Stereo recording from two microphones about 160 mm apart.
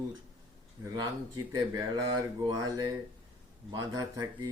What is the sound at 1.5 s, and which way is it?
Speech, 25° right (ahead or behind).